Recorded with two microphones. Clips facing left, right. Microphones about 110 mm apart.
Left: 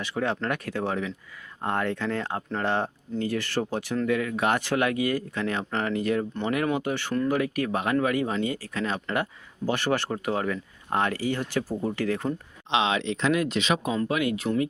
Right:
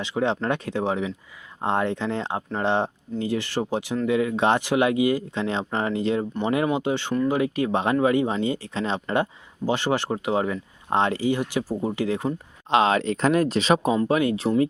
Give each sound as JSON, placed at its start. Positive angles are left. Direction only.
{"t": 0.0, "sound": "speech", "side_deg": -20}
{"t": 12.7, "sound": "speech", "side_deg": -45}